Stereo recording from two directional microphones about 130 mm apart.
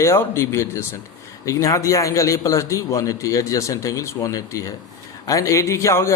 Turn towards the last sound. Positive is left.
turn(degrees=20)  # may be behind; listen again after turning